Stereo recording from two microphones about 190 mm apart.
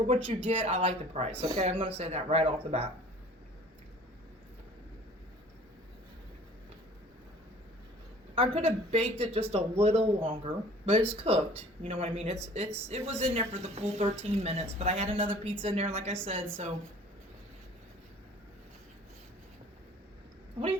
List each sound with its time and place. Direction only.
0.4 s speech: 35° right (ahead or behind)
8.4 s speech: 30° right (ahead or behind)